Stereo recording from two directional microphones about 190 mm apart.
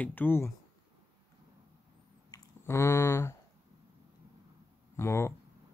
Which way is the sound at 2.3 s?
15° left (ahead or behind).